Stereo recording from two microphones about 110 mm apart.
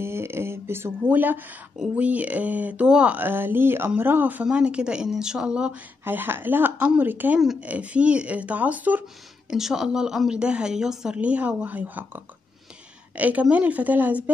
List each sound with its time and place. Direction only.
0.0 s a sound: 25° right (ahead or behind)
1.8 s speech: 10° right (ahead or behind)
9.5 s speech: 5° right (ahead or behind)
13.2 s speech: 15° right (ahead or behind)